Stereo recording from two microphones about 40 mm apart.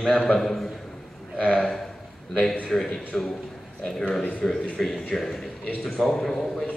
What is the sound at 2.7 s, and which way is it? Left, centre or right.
Speech, centre.